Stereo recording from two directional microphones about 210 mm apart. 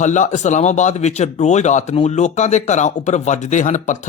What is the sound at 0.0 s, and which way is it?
Speech, 35° left (ahead or behind).